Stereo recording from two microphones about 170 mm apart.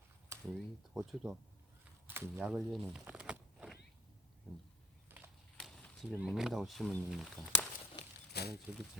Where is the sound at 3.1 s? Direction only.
5° right (ahead or behind).